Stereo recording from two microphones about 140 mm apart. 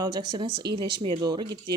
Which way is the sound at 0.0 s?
30° right (ahead or behind).